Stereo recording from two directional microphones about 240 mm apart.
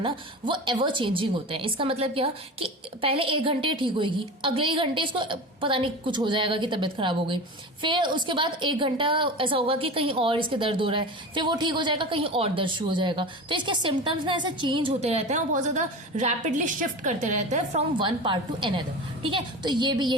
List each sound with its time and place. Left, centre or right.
0.0 s a woman's voice: right